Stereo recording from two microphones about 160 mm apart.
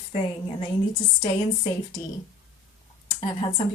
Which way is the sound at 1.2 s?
30° left (ahead or behind).